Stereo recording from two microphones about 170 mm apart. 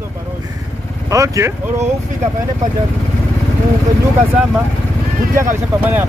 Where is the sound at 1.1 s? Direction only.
20° right (ahead or behind).